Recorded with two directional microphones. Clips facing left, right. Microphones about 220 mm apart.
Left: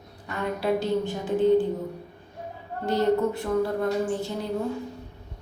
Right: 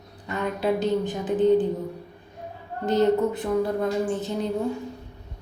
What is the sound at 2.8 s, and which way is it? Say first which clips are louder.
Speech: right 2 dB; 20° right (ahead or behind).